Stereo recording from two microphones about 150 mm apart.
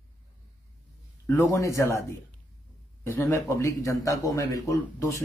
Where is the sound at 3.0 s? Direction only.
20° left (ahead or behind).